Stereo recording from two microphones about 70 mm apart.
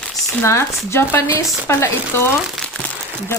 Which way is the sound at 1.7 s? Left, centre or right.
Left.